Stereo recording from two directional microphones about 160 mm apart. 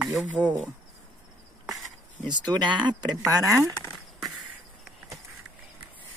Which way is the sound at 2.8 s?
25° right (ahead or behind).